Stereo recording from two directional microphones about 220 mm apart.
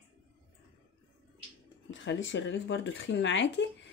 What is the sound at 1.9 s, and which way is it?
Speech, 55° left (ahead or behind).